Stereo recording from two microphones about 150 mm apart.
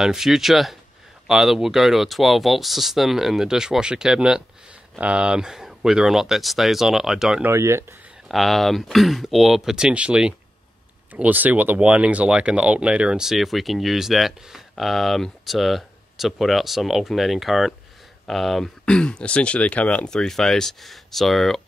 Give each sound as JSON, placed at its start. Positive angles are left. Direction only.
{"t": 0.0, "sound": "speech", "side_deg": 0}
{"t": 7.4, "sound": "speech", "side_deg": -20}
{"t": 8.3, "sound": "speech", "side_deg": 0}